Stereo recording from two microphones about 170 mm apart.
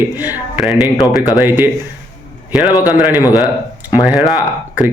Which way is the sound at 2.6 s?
20° left (ahead or behind).